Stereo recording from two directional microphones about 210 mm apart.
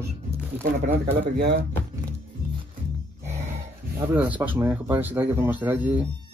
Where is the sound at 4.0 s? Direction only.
10° right (ahead or behind).